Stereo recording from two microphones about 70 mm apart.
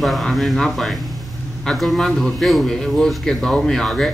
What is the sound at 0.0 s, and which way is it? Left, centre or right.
A man's voice, centre.